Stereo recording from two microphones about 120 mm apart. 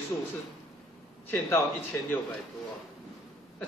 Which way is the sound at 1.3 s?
15° left (ahead or behind).